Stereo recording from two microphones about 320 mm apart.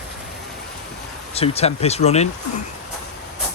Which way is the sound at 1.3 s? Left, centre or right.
Centre.